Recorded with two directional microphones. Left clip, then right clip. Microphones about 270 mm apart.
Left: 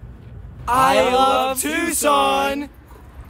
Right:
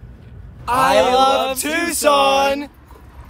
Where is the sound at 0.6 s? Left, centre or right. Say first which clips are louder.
Right 1 dB; centre.